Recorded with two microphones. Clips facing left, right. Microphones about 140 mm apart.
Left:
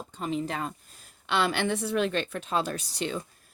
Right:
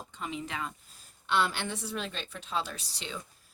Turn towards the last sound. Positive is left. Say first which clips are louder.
# left 9 dB
turn(degrees=50)  # may be behind; listen again after turning